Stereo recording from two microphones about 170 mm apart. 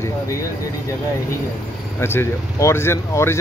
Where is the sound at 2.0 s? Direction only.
15° left (ahead or behind).